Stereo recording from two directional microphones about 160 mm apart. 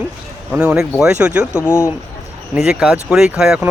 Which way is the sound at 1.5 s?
15° left (ahead or behind).